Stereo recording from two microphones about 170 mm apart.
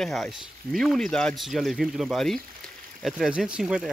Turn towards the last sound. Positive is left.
turn(degrees=-5)  # may be behind; listen again after turning